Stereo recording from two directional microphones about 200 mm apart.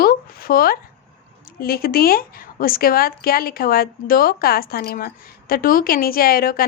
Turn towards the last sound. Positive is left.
turn(degrees=45)  # may be behind; listen again after turning